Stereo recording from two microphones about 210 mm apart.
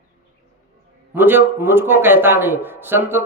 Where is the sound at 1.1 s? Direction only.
10° right (ahead or behind).